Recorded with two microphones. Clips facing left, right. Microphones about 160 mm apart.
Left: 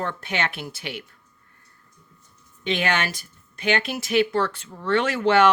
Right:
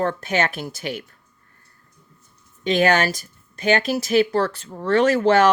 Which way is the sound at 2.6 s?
40° right (ahead or behind).